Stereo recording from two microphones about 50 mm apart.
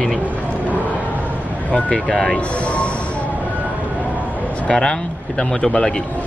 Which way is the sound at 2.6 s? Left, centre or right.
Left.